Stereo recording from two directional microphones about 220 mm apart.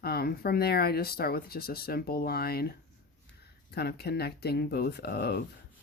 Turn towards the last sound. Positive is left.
turn(degrees=45)  # may be behind; listen again after turning